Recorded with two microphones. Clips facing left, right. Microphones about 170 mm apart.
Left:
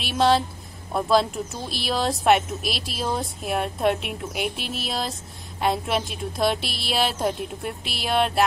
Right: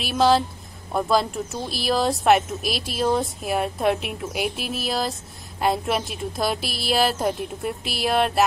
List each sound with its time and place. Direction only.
0.0 s speech: centre (ahead or behind)